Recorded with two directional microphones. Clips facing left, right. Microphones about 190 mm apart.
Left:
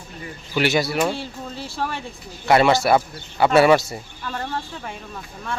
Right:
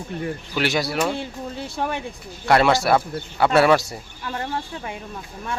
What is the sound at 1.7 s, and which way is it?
Speech, 15° right (ahead or behind).